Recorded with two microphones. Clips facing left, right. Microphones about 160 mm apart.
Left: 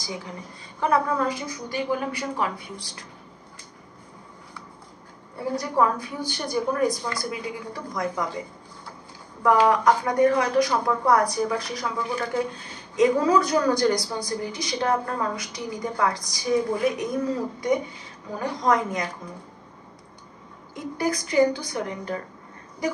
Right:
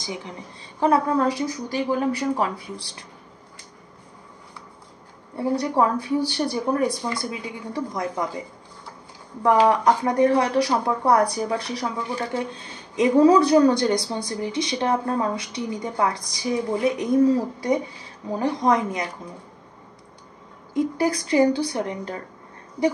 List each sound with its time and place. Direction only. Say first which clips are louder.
0.7 s speech: right 3 dB; 35° right (ahead or behind)
5.6 s speech: left 1 dB; 30° right (ahead or behind)
9.4 s speech: right 1 dB; 30° right (ahead or behind)
18.4 s speech: right 2 dB; 25° right (ahead or behind)
20.7 s speech: right 5 dB; 30° right (ahead or behind)